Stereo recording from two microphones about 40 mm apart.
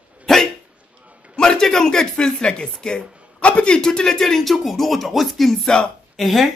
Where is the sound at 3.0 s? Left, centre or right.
Right.